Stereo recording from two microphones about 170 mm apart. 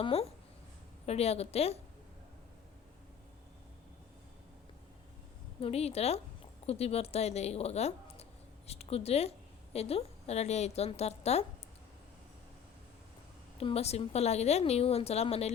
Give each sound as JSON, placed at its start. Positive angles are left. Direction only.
{"t": 0.0, "sound": "a woman's voice", "side_deg": 35}
{"t": 5.5, "sound": "a woman's voice", "side_deg": 35}
{"t": 13.6, "sound": "a woman's voice", "side_deg": 35}